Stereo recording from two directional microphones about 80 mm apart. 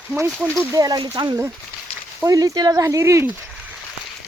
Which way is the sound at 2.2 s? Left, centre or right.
Right.